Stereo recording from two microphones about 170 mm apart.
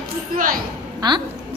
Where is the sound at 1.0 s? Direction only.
25° right (ahead or behind).